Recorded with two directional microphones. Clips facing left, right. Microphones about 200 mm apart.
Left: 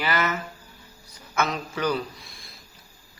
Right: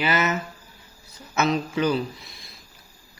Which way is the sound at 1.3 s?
25° right (ahead or behind).